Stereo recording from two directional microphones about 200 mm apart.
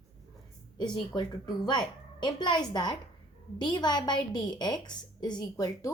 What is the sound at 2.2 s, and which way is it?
A woman's voice, 20° left (ahead or behind).